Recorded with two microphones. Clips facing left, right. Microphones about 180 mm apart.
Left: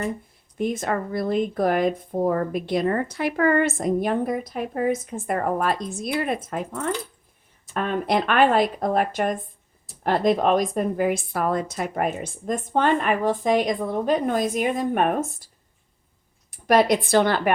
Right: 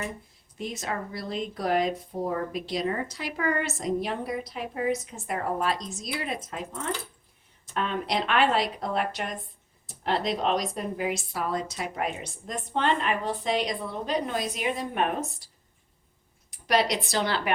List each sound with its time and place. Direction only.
0.6 s speech: 55° left (ahead or behind)
16.5 s speech: 50° left (ahead or behind)